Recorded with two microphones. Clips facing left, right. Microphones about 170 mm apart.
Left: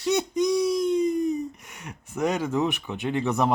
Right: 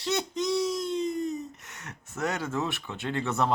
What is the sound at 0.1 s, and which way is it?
Speech, 15° left (ahead or behind).